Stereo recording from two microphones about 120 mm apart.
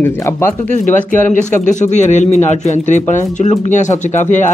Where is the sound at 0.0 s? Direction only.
20° left (ahead or behind).